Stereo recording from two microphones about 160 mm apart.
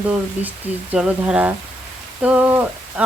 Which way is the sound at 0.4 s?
10° right (ahead or behind).